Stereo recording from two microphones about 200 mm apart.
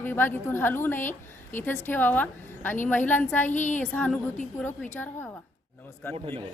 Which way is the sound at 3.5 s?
40° left (ahead or behind).